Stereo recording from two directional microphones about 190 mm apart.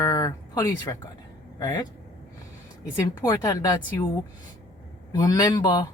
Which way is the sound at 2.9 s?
15° left (ahead or behind).